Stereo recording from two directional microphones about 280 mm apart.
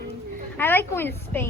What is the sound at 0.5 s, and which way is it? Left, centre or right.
Speech, centre.